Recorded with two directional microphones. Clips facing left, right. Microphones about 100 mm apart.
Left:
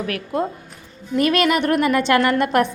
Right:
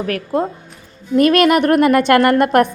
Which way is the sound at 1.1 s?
50° right (ahead or behind).